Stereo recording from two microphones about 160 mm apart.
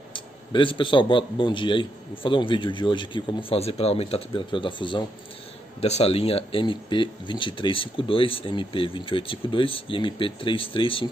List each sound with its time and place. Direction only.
0.1 s speech: 30° left (ahead or behind)